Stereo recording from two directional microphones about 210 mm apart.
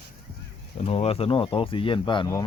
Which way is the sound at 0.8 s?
30° left (ahead or behind).